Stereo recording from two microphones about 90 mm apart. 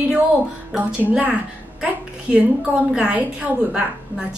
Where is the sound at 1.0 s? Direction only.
20° right (ahead or behind).